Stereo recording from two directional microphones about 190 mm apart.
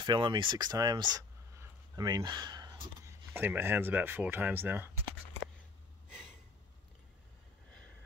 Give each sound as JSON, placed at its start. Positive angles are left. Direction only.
{"t": 0.0, "sound": "speech", "side_deg": -25}